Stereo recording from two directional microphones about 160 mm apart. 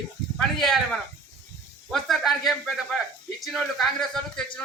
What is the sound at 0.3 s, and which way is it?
Speech, 5° left (ahead or behind).